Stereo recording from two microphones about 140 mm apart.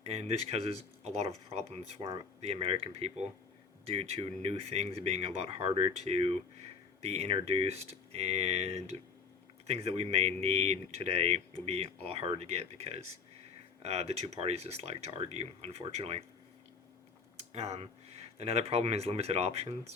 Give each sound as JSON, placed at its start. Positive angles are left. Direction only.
{"t": 0.0, "sound": "speech", "side_deg": -50}
{"t": 17.3, "sound": "speech", "side_deg": -50}